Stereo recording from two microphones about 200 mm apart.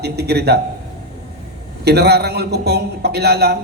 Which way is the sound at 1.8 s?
55° right (ahead or behind).